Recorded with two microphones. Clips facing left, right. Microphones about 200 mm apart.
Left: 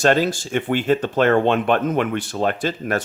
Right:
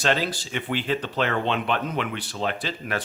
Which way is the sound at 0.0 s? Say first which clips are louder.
Left 7 dB; 50° left (ahead or behind).